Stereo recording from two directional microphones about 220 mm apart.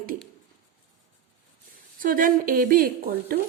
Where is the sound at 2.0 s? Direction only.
40° right (ahead or behind).